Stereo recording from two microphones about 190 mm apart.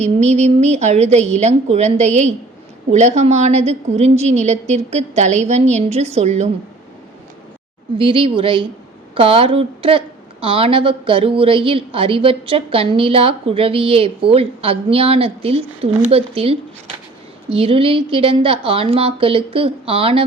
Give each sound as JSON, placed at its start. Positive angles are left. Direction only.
{"t": 0.0, "sound": "a woman's voice", "side_deg": -35}
{"t": 7.9, "sound": "a woman's voice", "side_deg": -25}